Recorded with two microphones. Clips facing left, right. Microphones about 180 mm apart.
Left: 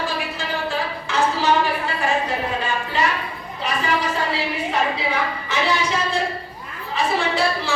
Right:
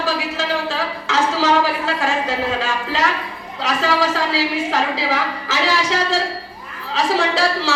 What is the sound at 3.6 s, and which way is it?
A woman's voice, 90° right.